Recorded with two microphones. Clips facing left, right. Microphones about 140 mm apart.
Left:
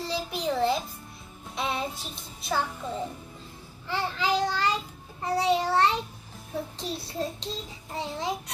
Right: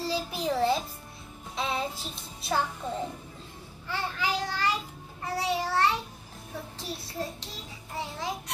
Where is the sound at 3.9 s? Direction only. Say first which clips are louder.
Left 4 dB; 20° left (ahead or behind).